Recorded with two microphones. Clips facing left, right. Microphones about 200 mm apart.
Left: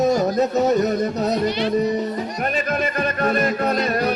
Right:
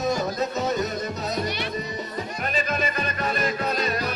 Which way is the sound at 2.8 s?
55° left (ahead or behind).